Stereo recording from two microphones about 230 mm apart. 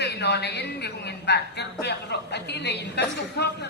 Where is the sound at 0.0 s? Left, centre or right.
Left.